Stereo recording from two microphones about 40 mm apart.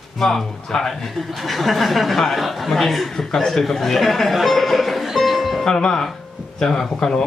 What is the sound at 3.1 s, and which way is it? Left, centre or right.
Speech, centre.